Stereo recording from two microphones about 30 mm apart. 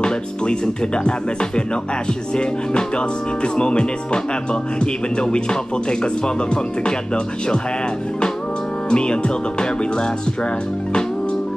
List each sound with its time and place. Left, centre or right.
0.0 s speech: left
3.5 s speech: left
8.9 s speech: left